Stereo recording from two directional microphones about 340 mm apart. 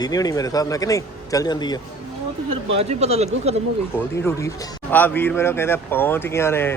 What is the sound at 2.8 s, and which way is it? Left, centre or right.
Speech, centre.